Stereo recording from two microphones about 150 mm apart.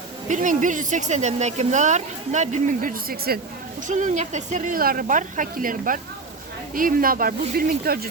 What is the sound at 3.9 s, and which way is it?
A woman's voice, 55° right (ahead or behind).